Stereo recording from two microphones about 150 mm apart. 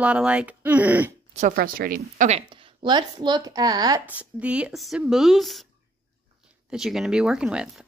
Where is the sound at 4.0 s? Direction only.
10° right (ahead or behind).